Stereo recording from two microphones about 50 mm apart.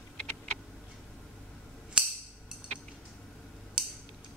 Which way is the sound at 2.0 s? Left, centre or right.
Right.